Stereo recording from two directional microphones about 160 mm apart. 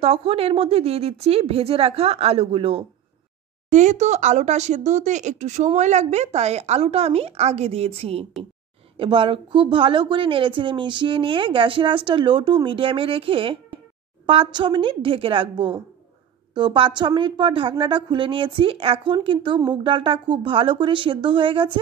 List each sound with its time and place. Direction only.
0.0 s a woman's voice: 35° right (ahead or behind)
3.7 s a woman's voice: 45° right (ahead or behind); by 21.7 s 30° right (ahead or behind)